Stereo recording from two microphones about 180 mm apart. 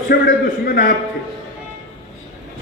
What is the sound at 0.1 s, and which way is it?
Speech, 60° left (ahead or behind).